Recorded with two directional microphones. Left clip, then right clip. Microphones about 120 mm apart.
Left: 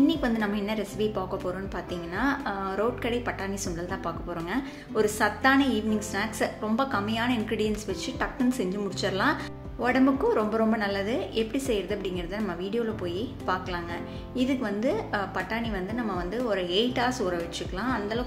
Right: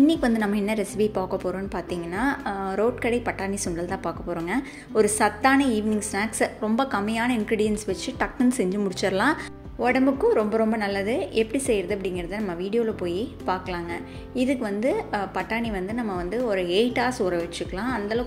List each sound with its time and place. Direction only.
0.0 s a woman's voice: 60° right (ahead or behind)
1.3 s a woman's voice: 50° right (ahead or behind)
9.8 s a woman's voice: 30° right (ahead or behind)